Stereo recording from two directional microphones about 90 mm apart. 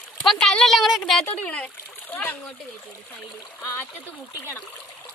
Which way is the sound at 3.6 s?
35° left (ahead or behind).